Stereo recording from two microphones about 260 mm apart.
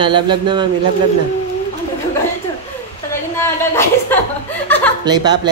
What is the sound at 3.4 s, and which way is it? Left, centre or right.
A woman's voice, centre.